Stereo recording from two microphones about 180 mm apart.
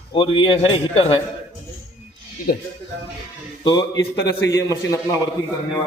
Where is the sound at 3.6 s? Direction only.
25° left (ahead or behind).